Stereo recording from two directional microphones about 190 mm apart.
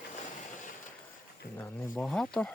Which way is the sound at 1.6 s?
10° left (ahead or behind).